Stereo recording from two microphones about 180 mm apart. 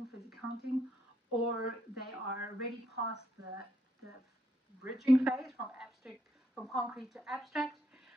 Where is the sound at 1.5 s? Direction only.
60° left (ahead or behind).